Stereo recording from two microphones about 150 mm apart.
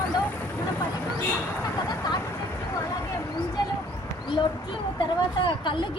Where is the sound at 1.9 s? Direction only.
25° left (ahead or behind).